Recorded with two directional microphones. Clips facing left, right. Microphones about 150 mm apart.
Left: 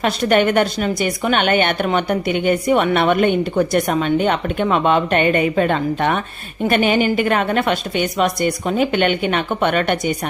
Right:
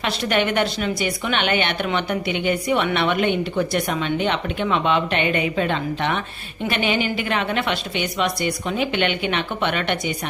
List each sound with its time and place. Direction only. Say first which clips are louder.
0.0 s a woman's voice: left 6 dB; 45° left (ahead or behind)